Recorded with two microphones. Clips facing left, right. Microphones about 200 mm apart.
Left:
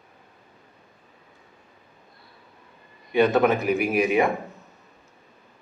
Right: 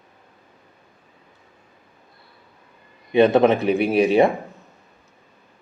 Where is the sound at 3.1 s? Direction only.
25° right (ahead or behind).